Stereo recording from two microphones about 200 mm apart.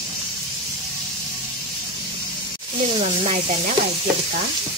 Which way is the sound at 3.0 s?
30° right (ahead or behind).